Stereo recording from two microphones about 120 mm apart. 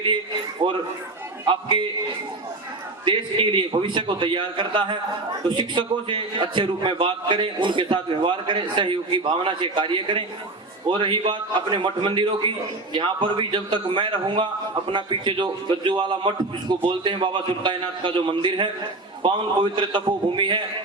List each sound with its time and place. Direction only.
0.6 s a man's voice: 50° right (ahead or behind)
3.0 s a man's voice: 45° right (ahead or behind)
19.7 s a man's voice: 40° right (ahead or behind)